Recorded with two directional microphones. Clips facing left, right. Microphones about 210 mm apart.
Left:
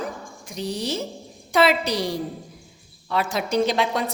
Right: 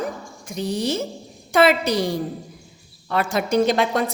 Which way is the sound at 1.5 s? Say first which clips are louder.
Right 3 dB; 50° right (ahead or behind).